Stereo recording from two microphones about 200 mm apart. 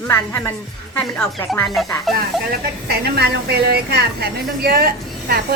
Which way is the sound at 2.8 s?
50° right (ahead or behind).